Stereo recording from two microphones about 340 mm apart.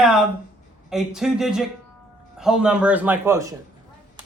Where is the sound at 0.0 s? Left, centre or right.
Centre.